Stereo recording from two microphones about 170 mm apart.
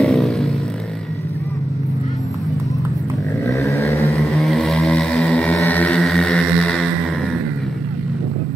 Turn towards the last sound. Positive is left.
turn(degrees=5)  # may be behind; listen again after turning